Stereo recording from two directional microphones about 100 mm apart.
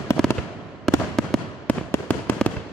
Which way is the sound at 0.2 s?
5° left (ahead or behind).